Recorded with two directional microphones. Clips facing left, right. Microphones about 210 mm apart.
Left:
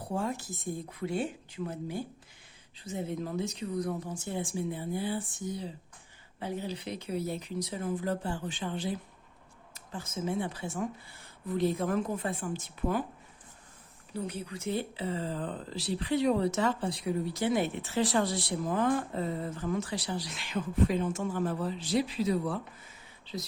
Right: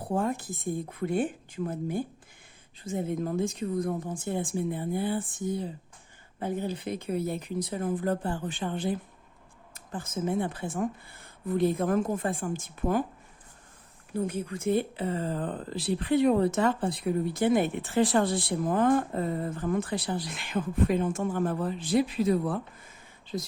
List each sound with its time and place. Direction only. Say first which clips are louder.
0.0 s speech: right 4 dB; 55° right (ahead or behind)
14.1 s speech: right 6 dB; 50° right (ahead or behind)
23.2 s whispering: right 5 dB; 50° right (ahead or behind)